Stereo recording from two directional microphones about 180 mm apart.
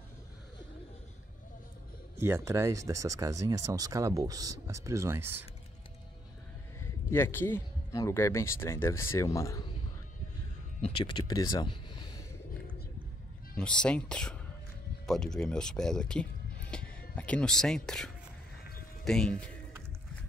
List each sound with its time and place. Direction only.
2.1 s speech: 15° right (ahead or behind)
6.8 s speech: 15° left (ahead or behind)
10.8 s speech: 25° left (ahead or behind)
13.6 s speech: 5° left (ahead or behind)